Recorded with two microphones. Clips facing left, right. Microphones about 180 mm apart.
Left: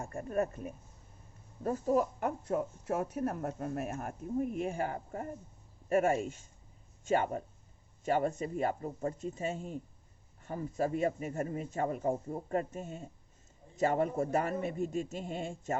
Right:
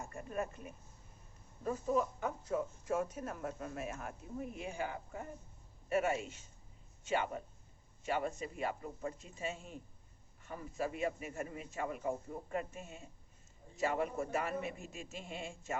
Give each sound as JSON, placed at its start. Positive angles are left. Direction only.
{"t": 0.0, "sound": "speech", "side_deg": 50}
{"t": 2.2, "sound": "speech", "side_deg": 60}